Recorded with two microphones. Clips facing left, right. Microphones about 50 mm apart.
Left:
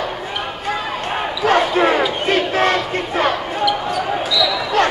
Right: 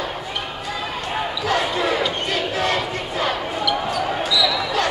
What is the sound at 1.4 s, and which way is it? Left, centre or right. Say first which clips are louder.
Basketball bounce: left 8 dB; left.